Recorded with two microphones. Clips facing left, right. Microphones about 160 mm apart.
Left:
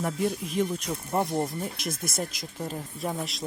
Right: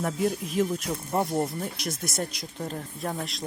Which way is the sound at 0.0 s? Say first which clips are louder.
Right 1 dB; centre (ahead or behind).